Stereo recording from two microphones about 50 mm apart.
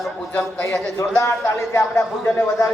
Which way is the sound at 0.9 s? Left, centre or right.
Left.